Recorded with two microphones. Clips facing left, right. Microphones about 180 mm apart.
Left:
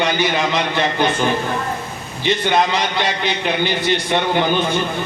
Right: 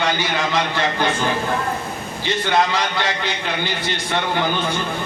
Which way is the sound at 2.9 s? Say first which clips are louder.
Left 3 dB; 20° left (ahead or behind).